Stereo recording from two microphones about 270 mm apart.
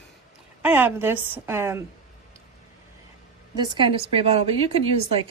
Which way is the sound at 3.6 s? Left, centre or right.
Centre.